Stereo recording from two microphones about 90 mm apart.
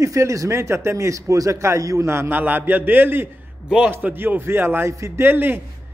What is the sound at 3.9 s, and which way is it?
A man's voice, 25° right (ahead or behind).